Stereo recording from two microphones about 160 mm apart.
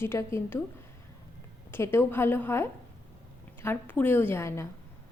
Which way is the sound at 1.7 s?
15° left (ahead or behind).